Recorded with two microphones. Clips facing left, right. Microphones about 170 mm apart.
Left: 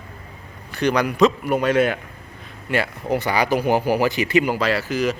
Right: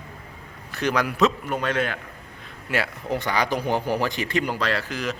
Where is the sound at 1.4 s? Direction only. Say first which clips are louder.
Left 7 dB; 10° left (ahead or behind).